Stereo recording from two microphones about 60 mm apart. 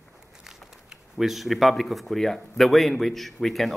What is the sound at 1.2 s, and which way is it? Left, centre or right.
Speech, centre.